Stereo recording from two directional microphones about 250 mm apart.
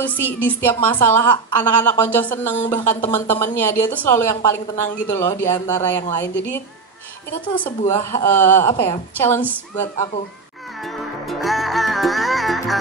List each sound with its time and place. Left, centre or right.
0.0 s a woman's voice: centre
10.8 s music: centre